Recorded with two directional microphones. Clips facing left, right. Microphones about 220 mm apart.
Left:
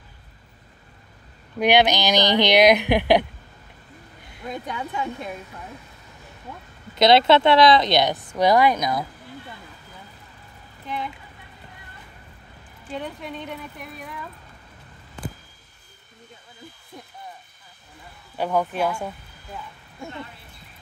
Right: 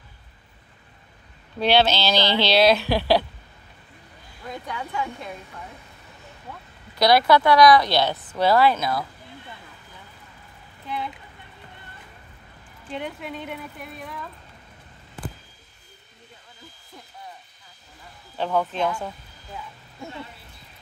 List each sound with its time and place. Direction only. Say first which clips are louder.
1.6 s speech: left 1 dB; 15° left (ahead or behind)
4.4 s speech: left 3 dB; 20° left (ahead or behind)
7.0 s speech: left 2 dB; 25° left (ahead or behind)
13.0 s speech: even; 5° right (ahead or behind)
18.4 s speech: left 1 dB; 10° left (ahead or behind)